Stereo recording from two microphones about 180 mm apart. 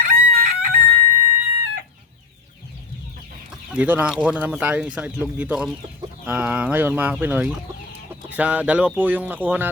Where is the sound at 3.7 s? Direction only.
10° right (ahead or behind).